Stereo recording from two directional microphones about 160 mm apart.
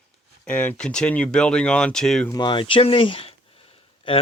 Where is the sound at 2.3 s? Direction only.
30° left (ahead or behind).